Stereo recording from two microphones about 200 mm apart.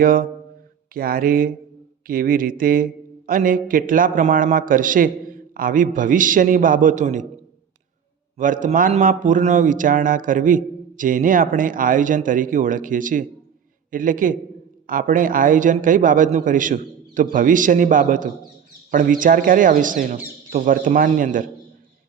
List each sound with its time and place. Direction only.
0.0 s a man's voice: 45° right (ahead or behind)
8.4 s a man's voice: 40° right (ahead or behind)